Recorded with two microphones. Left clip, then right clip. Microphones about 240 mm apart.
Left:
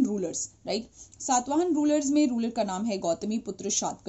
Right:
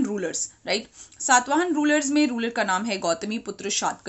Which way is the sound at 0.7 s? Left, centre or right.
Centre.